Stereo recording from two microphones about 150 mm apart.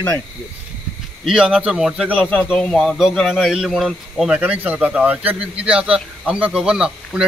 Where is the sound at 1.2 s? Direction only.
5° right (ahead or behind).